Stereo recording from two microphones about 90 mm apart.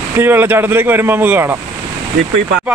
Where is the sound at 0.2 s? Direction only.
25° right (ahead or behind).